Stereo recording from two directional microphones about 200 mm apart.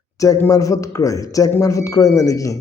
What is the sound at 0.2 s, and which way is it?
A man's voice, 15° left (ahead or behind).